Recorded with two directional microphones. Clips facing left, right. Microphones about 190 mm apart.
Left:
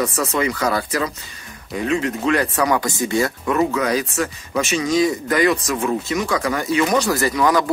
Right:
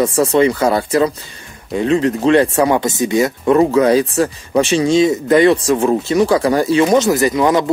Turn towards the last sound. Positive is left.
turn(degrees=-25)  # may be behind; listen again after turning